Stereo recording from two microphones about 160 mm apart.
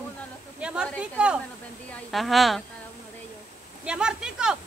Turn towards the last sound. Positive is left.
turn(degrees=-5)  # may be behind; listen again after turning